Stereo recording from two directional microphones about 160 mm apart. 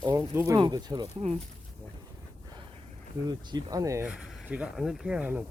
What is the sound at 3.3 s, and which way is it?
Speech, 25° right (ahead or behind).